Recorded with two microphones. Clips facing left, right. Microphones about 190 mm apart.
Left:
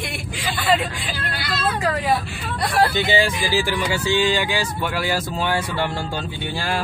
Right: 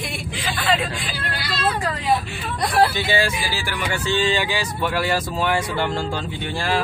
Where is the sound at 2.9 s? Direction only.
15° left (ahead or behind).